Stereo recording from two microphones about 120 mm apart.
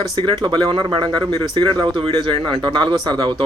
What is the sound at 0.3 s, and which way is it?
Speech, 40° right (ahead or behind).